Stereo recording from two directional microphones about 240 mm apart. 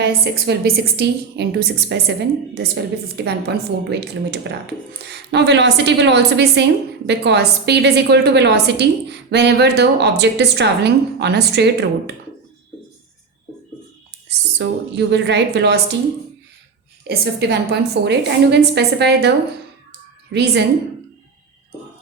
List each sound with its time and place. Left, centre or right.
0.0 s a woman's voice: right
3.2 s a woman's voice: right
14.3 s a woman's voice: right
17.0 s a woman's voice: right
20.3 s a woman's voice: right